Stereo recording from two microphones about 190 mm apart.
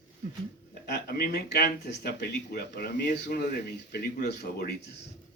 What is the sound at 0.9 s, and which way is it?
Speech, 55° left (ahead or behind).